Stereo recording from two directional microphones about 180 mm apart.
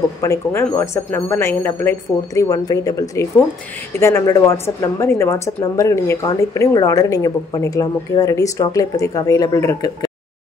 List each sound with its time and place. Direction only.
0.2 s a woman's voice: 15° left (ahead or behind)